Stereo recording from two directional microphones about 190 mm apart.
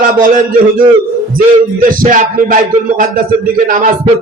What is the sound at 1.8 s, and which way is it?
A man's voice, 45° right (ahead or behind).